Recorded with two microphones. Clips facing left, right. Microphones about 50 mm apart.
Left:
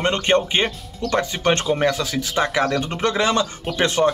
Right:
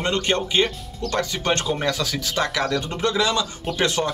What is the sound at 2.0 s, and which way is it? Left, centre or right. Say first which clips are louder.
Speech: left 3 dB; centre.